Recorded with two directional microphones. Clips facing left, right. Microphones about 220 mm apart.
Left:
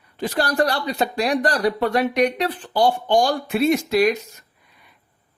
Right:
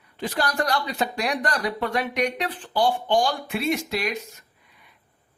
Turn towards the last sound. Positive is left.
turn(degrees=40)  # may be behind; listen again after turning